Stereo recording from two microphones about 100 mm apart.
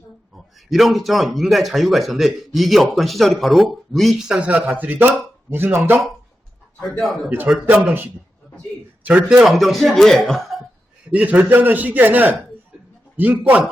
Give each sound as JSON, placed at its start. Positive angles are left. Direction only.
{"t": 0.3, "sound": "speech", "side_deg": 0}
{"t": 7.0, "sound": "speech", "side_deg": 0}
{"t": 7.3, "sound": "a man's voice", "side_deg": -15}
{"t": 9.0, "sound": "speech", "side_deg": -10}
{"t": 11.1, "sound": "a man's voice", "side_deg": -15}